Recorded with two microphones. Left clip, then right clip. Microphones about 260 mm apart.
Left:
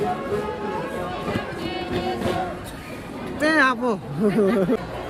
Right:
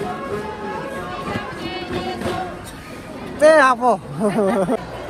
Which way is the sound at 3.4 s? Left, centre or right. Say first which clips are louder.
Right 7 dB; centre.